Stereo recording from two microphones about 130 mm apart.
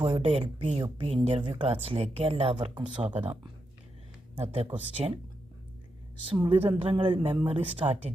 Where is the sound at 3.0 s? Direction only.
10° right (ahead or behind).